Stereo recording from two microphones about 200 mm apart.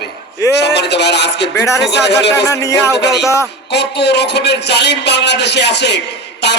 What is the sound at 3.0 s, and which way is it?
A man's voice, 55° left (ahead or behind).